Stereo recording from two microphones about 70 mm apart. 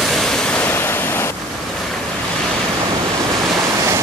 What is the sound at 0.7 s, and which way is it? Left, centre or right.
Waves, left.